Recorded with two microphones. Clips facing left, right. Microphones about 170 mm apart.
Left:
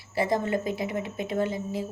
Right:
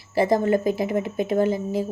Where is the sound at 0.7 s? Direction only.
30° right (ahead or behind).